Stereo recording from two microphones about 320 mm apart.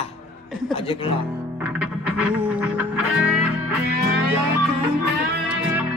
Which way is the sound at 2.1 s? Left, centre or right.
Centre.